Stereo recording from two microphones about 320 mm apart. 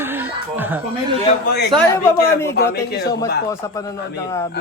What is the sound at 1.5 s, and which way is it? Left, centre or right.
A man's voice, left.